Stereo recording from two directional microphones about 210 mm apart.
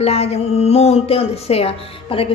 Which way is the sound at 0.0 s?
30° left (ahead or behind).